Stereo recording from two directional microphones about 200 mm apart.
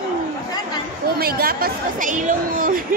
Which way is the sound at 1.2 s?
50° right (ahead or behind).